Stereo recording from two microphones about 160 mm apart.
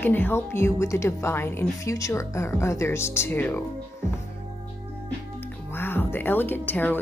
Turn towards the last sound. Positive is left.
turn(degrees=10)  # may be behind; listen again after turning